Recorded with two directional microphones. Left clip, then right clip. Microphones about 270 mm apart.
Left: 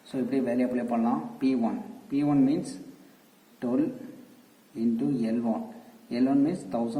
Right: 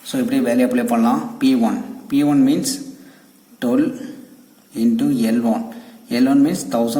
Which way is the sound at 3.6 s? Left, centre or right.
Right.